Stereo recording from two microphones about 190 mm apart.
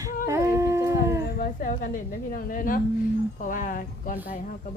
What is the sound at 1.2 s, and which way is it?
A woman's voice, 50° left (ahead or behind).